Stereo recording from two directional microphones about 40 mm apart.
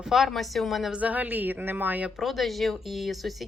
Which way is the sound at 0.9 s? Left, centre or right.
Right.